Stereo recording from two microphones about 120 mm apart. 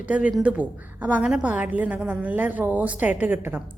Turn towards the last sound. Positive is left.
turn(degrees=-15)  # may be behind; listen again after turning